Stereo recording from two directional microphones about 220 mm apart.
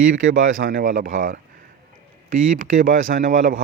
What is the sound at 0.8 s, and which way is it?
Speech, 35° right (ahead or behind).